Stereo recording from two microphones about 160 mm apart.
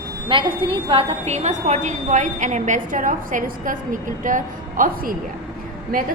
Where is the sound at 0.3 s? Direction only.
35° right (ahead or behind).